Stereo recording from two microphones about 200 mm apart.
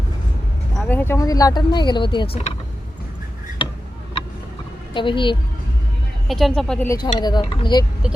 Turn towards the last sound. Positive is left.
turn(degrees=20)  # may be behind; listen again after turning